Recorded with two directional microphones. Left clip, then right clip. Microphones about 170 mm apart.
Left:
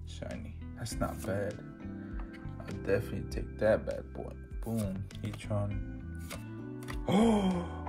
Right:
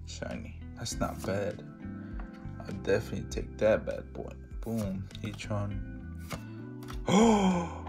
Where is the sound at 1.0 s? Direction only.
15° right (ahead or behind).